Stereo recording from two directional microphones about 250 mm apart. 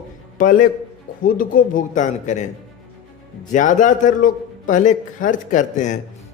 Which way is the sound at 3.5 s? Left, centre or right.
Left.